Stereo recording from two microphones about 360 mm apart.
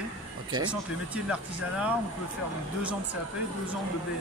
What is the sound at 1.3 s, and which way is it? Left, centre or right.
Speech, centre.